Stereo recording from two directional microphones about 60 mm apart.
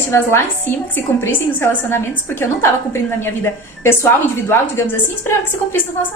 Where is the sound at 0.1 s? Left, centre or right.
Left.